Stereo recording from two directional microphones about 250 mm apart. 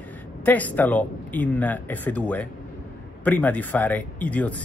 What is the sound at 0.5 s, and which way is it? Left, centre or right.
Speech, centre.